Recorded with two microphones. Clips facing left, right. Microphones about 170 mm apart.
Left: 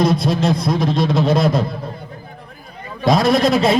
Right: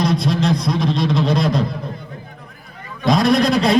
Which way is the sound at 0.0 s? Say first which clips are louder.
Left 2 dB; 5° left (ahead or behind).